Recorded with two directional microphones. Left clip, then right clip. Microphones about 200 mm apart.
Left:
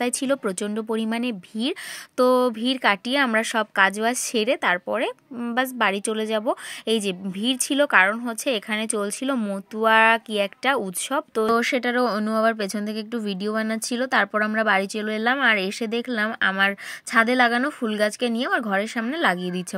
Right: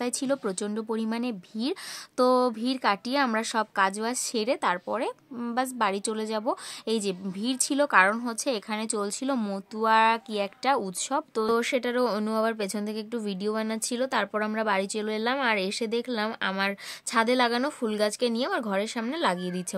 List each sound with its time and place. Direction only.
0.0 s speech: 20° left (ahead or behind)